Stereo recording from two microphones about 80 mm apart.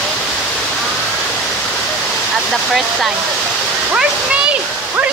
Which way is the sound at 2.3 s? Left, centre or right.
Centre.